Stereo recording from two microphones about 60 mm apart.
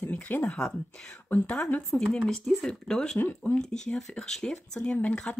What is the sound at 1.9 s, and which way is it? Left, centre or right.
Speech, centre.